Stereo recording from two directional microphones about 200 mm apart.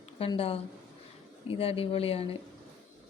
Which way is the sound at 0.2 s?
30° left (ahead or behind).